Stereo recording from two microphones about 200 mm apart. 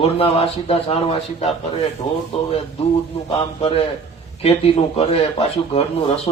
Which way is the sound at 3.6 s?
30° left (ahead or behind).